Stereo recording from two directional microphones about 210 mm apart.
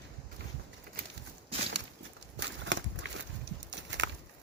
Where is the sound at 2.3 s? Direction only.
60° right (ahead or behind).